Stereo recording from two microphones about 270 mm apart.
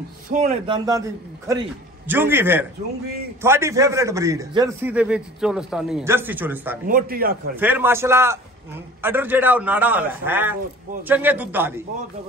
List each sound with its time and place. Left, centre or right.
0.3 s a man's voice: right; by 6.8 s centre
6.9 s a man's voice: right
7.5 s a man's voice: centre